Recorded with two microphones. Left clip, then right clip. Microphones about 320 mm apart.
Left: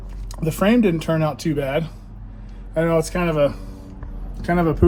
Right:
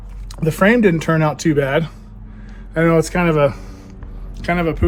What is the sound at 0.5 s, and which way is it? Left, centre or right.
Speech, right.